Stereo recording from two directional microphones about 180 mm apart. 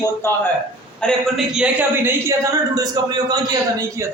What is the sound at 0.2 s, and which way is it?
Speech, 15° left (ahead or behind).